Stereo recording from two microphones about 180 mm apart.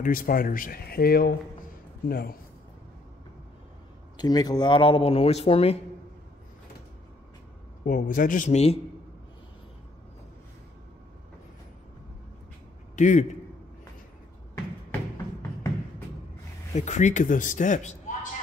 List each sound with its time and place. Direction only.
0.0 s a man's voice: 50° left (ahead or behind)
4.2 s speech: 20° left (ahead or behind)
7.8 s speech: 50° left (ahead or behind)
12.9 s a man's voice: 45° left (ahead or behind)
16.7 s speech: 40° left (ahead or behind)